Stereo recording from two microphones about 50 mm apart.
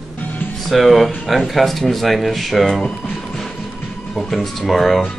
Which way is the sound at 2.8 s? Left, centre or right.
Centre.